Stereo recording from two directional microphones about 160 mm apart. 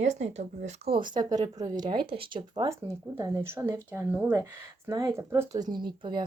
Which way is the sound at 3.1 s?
20° right (ahead or behind).